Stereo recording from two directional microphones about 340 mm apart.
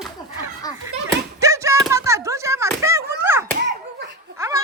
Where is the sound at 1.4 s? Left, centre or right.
Centre.